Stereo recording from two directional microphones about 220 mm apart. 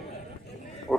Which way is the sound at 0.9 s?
Centre (ahead or behind).